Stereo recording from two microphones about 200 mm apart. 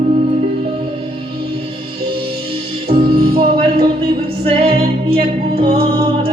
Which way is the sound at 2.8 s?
30° right (ahead or behind).